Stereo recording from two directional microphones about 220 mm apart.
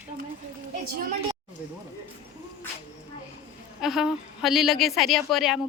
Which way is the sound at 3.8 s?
Centre (ahead or behind).